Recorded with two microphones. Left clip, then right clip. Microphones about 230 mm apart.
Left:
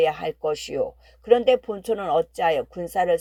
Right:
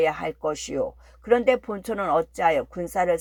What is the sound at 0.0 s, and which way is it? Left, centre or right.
Speech, left.